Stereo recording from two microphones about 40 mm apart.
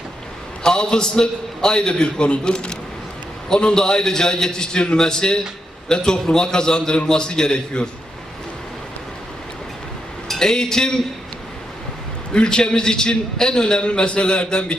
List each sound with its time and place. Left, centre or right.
0.6 s a man's voice: left
10.2 s speech: centre
12.3 s a man's voice: left